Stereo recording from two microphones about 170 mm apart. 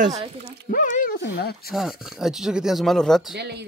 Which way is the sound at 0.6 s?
50° left (ahead or behind).